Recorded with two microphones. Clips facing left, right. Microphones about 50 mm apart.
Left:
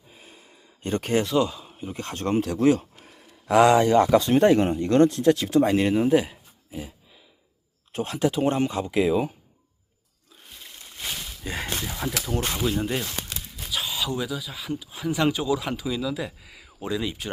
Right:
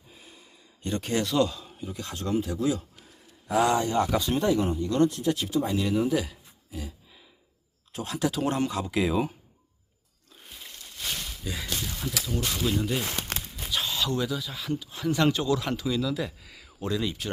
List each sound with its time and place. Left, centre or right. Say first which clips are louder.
0.1 s gasp: left 2 dB; left
1.2 s speech: left 2 dB; centre
1.8 s speech: left 5 dB; left
3.4 s speech: left 7 dB; left
4.1 s speech: left 7 dB; left
5.8 s speech: left 5 dB; left
7.9 s speech: left 4 dB; left
8.3 s speech: left 4 dB; left
9.0 s speech: left 4 dB; centre
10.3 s a sound: even; centre
10.8 s a sound: left 1 dB; centre
11.4 s speech: left 4 dB; left
13.1 s crumpling: right 2 dB; right
13.4 s speech: even; centre